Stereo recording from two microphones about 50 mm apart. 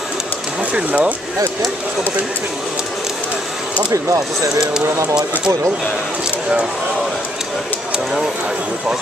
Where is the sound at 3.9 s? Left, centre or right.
Right.